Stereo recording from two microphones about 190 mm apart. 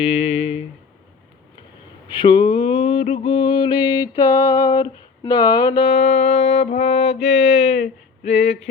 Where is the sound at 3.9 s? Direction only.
25° left (ahead or behind).